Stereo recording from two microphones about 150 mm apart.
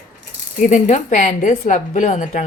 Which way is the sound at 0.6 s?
55° left (ahead or behind).